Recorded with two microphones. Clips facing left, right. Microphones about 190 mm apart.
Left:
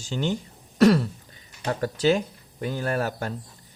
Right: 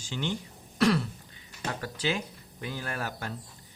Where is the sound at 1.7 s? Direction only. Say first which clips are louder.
Left 10 dB; 40° left (ahead or behind).